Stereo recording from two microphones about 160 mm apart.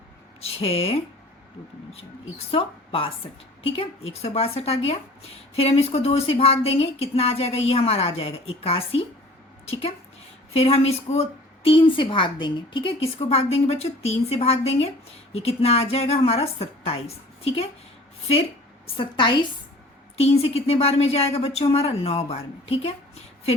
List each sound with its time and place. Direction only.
0.4 s a woman's voice: 35° left (ahead or behind)
2.5 s a woman's voice: 35° left (ahead or behind)
10.5 s a woman's voice: 40° left (ahead or behind)
18.9 s a woman's voice: 30° left (ahead or behind)